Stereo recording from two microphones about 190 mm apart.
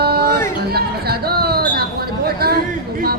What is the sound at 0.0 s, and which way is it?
Music, 55° right (ahead or behind).